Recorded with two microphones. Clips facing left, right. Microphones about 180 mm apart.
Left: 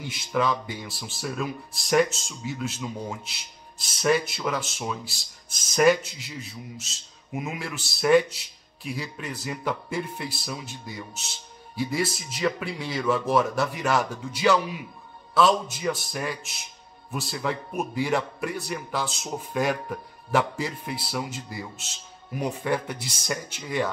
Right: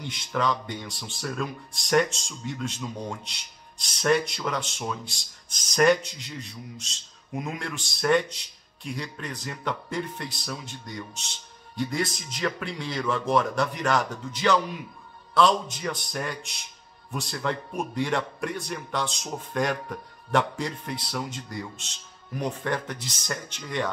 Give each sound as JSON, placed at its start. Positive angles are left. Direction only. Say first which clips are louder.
{"t": 0.0, "sound": "speech", "louder": "left 2 dB", "side_deg": 5}